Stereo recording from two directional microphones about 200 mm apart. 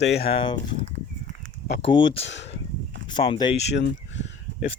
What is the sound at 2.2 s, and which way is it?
Speech, 65° left (ahead or behind).